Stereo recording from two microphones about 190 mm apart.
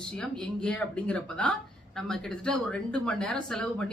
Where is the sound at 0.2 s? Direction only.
5° left (ahead or behind).